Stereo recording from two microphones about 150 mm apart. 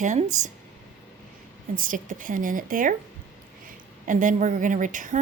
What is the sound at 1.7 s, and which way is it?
A woman's voice, 65° right (ahead or behind).